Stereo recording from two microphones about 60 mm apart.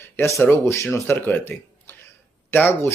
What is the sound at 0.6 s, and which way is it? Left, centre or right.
Speech, left.